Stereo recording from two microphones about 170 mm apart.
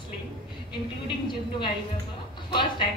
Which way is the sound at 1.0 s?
25° left (ahead or behind).